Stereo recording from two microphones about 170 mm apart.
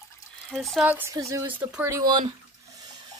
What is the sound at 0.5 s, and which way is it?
Speech, centre (ahead or behind).